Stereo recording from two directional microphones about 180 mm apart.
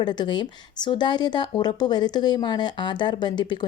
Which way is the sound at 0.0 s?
25° left (ahead or behind).